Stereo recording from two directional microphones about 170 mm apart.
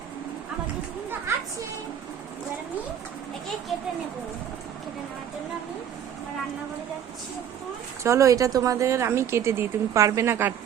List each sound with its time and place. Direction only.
8.0 s speech: 15° right (ahead or behind)